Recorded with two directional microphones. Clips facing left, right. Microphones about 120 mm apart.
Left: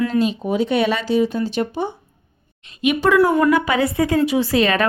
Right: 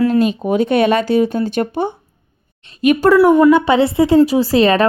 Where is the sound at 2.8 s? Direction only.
40° right (ahead or behind).